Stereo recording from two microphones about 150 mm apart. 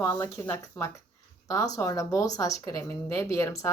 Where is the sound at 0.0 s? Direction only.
15° left (ahead or behind).